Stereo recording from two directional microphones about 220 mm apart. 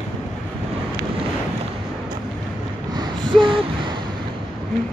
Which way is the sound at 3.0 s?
20° right (ahead or behind).